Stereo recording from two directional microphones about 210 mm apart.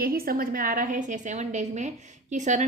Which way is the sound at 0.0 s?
45° right (ahead or behind).